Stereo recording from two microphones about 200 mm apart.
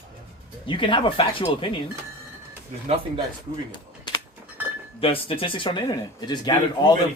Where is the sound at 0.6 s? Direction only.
25° left (ahead or behind).